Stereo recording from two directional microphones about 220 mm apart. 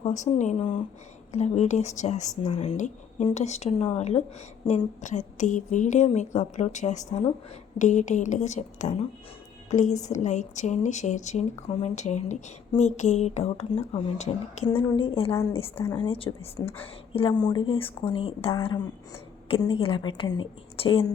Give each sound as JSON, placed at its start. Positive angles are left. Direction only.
{"t": 0.0, "sound": "a woman's voice", "side_deg": 35}